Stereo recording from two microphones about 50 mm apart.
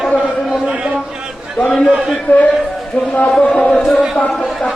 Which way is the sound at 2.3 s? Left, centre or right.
Left.